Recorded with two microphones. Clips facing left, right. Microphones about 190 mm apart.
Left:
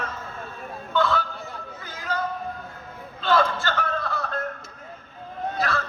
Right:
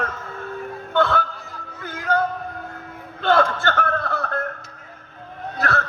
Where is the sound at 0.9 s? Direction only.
60° right (ahead or behind).